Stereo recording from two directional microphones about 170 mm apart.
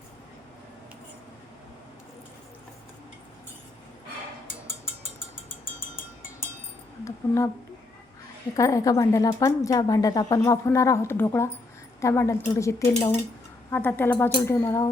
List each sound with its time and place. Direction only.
7.0 s speech: 15° left (ahead or behind)
8.5 s speech: 20° left (ahead or behind)